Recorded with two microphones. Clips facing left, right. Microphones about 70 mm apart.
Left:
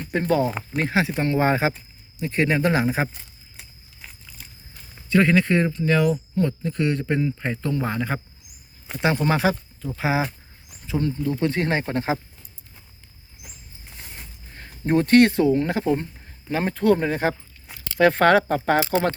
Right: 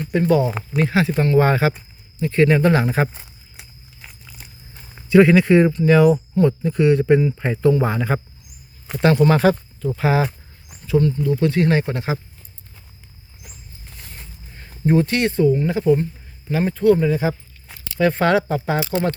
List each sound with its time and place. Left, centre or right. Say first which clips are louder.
0.1 s speech: right 4 dB; left
0.4 s speech: right 2 dB; centre
0.9 s speech: right 3 dB; centre
3.6 s biting: right 1 dB; centre
5.0 s speech: right 6 dB; centre
9.1 s speech: right 7 dB; centre
10.8 s speech: right 6 dB; left
13.9 s a sound: even; centre
14.8 s speech: left 2 dB; left
15.8 s speech: right 6 dB; left